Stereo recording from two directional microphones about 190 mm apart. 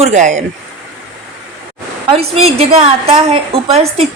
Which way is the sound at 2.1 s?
30° right (ahead or behind).